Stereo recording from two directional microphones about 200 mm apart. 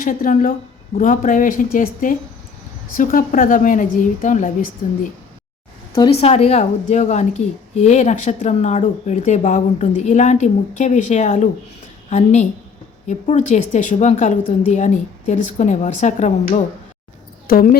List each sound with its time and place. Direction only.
0.0 s speech: 40° left (ahead or behind)
6.0 s speech: 30° left (ahead or behind)
17.4 s speech: 45° left (ahead or behind)